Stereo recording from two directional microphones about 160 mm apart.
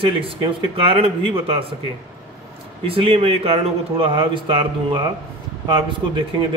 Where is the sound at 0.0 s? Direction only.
35° right (ahead or behind).